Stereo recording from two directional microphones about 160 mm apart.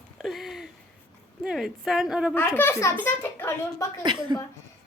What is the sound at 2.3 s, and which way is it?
A child's voice, 15° left (ahead or behind).